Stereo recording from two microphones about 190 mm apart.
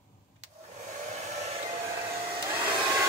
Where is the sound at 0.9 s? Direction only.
35° right (ahead or behind).